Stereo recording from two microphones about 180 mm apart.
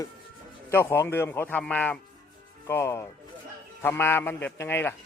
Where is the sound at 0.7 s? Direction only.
15° left (ahead or behind).